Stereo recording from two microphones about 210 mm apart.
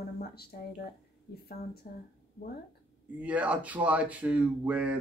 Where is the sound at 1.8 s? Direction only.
40° left (ahead or behind).